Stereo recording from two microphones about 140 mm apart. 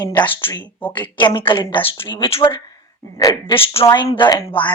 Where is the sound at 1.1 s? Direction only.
35° left (ahead or behind).